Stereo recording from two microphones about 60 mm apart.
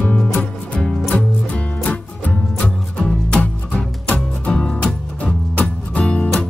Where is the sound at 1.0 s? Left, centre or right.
Left.